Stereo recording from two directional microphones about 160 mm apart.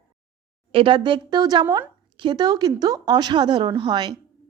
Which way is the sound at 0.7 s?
30° right (ahead or behind).